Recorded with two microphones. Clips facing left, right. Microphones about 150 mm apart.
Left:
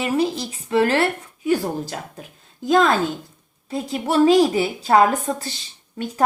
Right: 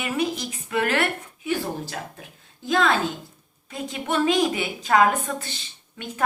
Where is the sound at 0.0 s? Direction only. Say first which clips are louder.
Left 5 dB; 30° left (ahead or behind).